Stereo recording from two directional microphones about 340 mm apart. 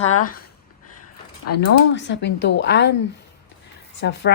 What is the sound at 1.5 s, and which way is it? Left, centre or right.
Speech, left.